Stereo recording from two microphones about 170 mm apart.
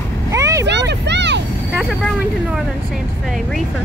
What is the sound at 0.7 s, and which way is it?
Vehicle, 90° right.